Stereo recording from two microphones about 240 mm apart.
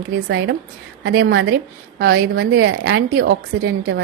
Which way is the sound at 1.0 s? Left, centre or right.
Right.